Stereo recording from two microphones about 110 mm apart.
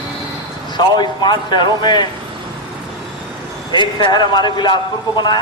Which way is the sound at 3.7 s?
45° left (ahead or behind).